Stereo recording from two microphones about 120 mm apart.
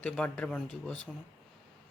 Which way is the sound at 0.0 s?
10° left (ahead or behind).